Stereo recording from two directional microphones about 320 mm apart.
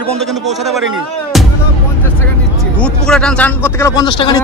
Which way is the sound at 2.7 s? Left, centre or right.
Centre.